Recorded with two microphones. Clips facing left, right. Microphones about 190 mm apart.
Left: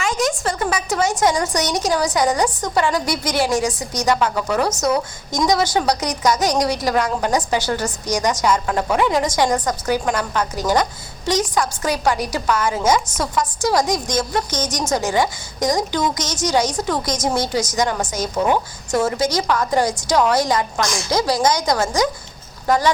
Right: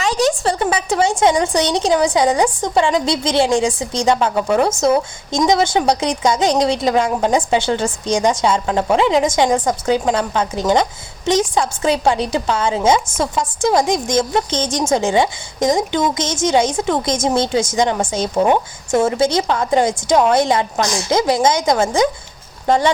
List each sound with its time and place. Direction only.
0.0 s a woman's voice: 35° right (ahead or behind)